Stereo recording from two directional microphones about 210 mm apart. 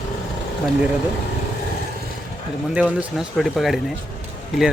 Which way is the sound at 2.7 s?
5° right (ahead or behind).